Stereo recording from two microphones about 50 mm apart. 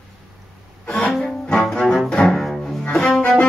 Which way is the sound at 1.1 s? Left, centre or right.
Centre.